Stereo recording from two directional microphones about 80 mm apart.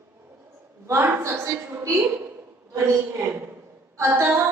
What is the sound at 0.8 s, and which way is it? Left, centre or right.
A woman's voice, right.